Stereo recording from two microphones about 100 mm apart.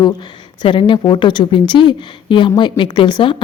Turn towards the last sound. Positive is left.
turn(degrees=50)  # may be behind; listen again after turning